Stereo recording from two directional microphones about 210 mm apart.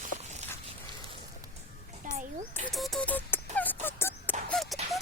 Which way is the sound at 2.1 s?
40° right (ahead or behind).